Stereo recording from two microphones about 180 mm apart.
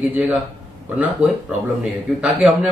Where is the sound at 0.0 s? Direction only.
10° right (ahead or behind).